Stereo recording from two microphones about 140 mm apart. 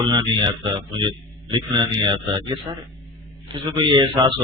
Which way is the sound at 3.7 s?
30° right (ahead or behind).